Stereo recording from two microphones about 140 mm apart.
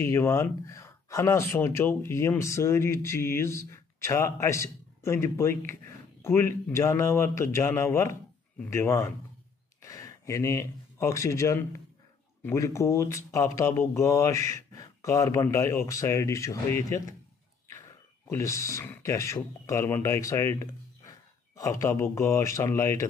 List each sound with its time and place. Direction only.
0.0 s speech: 20° left (ahead or behind)